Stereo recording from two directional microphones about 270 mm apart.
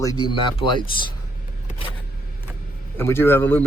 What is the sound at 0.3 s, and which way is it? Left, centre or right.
Speech, centre.